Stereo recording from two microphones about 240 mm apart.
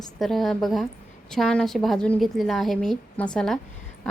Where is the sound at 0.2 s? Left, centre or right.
Centre.